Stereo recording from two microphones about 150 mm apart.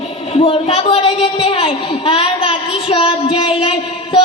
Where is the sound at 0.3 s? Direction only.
40° left (ahead or behind).